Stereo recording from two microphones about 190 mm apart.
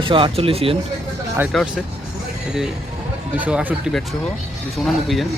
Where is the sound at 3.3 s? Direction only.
10° right (ahead or behind).